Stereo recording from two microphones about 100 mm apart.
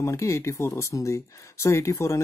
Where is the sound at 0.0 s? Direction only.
30° left (ahead or behind).